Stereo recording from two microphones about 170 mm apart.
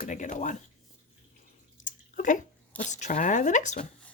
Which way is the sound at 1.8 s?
50° left (ahead or behind).